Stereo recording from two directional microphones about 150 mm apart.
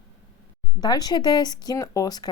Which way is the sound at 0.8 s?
25° left (ahead or behind).